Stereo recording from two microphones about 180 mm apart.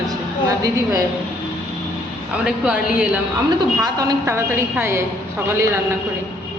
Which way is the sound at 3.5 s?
20° right (ahead or behind).